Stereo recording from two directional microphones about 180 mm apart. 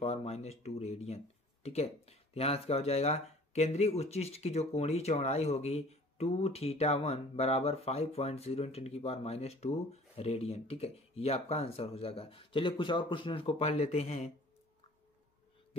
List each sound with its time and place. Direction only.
0.0 s speech: 35° left (ahead or behind)